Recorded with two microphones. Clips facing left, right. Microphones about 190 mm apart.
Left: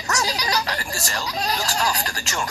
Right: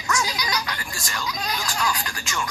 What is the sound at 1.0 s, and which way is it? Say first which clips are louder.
Speech: left 2 dB; 40° left (ahead or behind).